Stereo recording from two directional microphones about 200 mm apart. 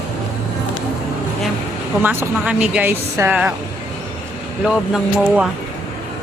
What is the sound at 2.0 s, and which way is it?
Speech, 5° right (ahead or behind).